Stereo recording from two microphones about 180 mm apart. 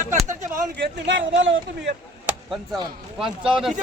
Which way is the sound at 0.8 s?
85° right.